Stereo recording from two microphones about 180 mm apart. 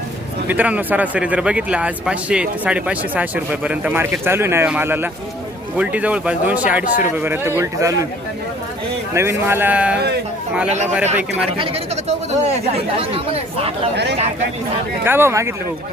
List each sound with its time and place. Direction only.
0.4 s speech: 10° right (ahead or behind)
9.1 s speech: 15° right (ahead or behind)
11.1 s speech: 10° right (ahead or behind)
11.5 s speech: 35° right (ahead or behind)
13.9 s speech: 70° right (ahead or behind)
15.0 s speech: 10° right (ahead or behind)